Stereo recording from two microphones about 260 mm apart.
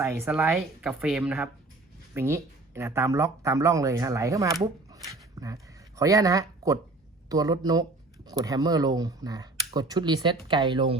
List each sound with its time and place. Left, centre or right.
0.0 s speech: centre
4.6 s a sound: centre
6.0 s speech: centre